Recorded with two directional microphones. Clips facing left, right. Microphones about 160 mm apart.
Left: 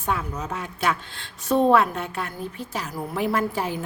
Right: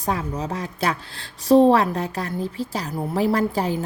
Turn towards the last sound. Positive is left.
turn(degrees=-35)  # may be behind; listen again after turning